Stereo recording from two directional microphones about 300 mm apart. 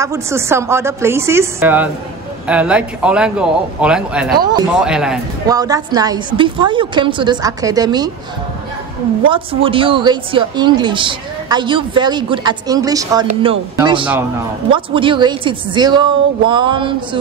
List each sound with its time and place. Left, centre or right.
0.0 s a man's voice: centre
4.4 s speech: centre
4.7 s speech: centre
9.3 s speech: centre